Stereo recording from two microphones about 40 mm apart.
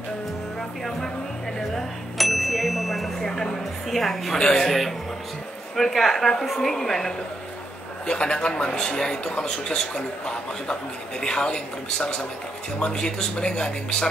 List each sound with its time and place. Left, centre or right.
0.6 s speech: centre
2.1 s speech: centre
3.2 s a woman's voice: centre
4.4 s speech: centre
4.6 s a woman's voice: centre
8.1 s speech: left